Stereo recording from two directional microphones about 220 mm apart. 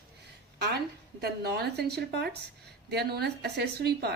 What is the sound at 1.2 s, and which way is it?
Speech, 45° right (ahead or behind).